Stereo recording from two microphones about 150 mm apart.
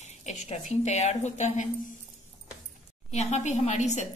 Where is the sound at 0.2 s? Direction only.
50° left (ahead or behind).